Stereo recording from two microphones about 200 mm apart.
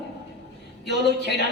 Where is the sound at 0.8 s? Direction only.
55° left (ahead or behind).